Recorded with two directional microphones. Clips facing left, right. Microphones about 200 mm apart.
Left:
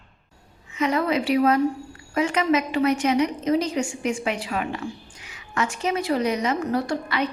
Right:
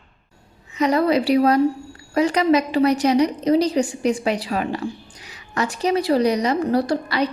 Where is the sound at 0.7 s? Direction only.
35° right (ahead or behind).